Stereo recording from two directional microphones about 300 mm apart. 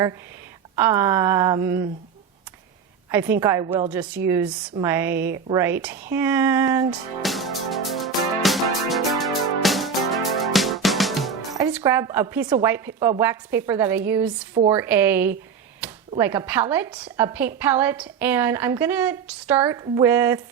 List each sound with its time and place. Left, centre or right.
0.8 s speech: centre
3.1 s a woman's voice: centre
7.2 s music: centre
11.5 s a woman's voice: centre
14.5 s a woman's voice: right
14.8 s speech: centre